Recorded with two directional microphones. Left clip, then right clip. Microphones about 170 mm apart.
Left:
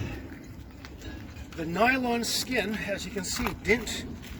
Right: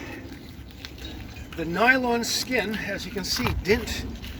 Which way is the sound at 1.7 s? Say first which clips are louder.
Right 4 dB; 30° left (ahead or behind).